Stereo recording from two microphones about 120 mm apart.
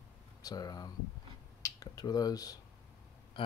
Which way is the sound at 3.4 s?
45° left (ahead or behind).